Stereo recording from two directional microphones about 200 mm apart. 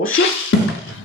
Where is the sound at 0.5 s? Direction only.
80° left.